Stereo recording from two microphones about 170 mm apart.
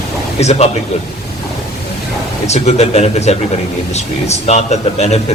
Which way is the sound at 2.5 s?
40° left (ahead or behind).